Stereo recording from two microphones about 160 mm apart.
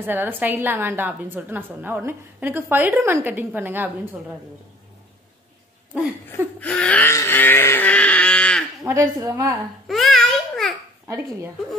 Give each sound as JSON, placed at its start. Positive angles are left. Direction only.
{"t": 0.0, "sound": "a woman's voice", "side_deg": -10}
{"t": 6.2, "sound": "wail", "side_deg": 5}
{"t": 8.8, "sound": "a woman's voice", "side_deg": -20}
{"t": 9.5, "sound": "babbling", "side_deg": 0}